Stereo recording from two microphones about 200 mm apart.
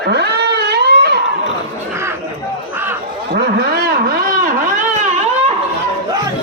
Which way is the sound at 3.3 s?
50° right (ahead or behind).